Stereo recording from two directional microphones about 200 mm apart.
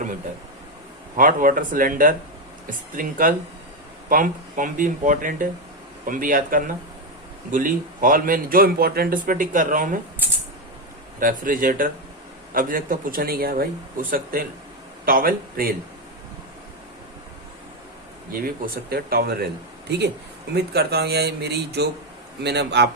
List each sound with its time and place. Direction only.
1.1 s speech: 45° right (ahead or behind)
11.2 s speech: 45° right (ahead or behind)
18.3 s a man's voice: 45° right (ahead or behind)